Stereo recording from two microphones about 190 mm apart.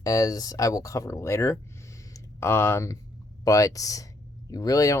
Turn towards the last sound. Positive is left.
turn(degrees=20)  # may be behind; listen again after turning